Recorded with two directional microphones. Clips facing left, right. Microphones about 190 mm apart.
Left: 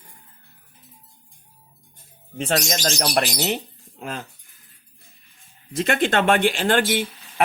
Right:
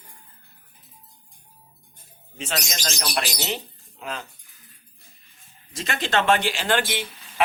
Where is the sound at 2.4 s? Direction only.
50° left (ahead or behind).